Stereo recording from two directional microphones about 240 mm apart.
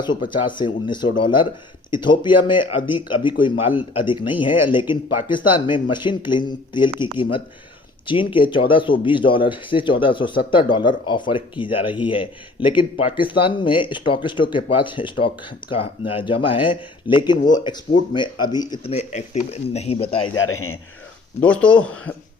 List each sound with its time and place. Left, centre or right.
0.4 s speech: centre
20.3 s a man's voice: left
21.4 s speech: centre